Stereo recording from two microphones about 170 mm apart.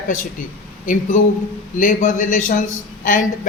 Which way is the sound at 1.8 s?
50° left (ahead or behind).